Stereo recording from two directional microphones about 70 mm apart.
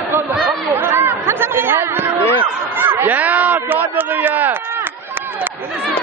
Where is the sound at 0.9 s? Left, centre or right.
Right.